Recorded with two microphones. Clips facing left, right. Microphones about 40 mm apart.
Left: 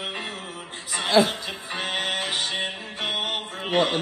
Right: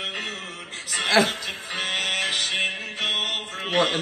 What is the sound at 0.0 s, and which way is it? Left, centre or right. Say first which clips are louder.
Music: right 1 dB; right.